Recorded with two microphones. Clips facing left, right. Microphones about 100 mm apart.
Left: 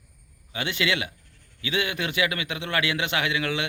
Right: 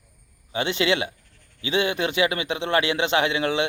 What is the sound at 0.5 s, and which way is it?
A man's voice, 25° right (ahead or behind).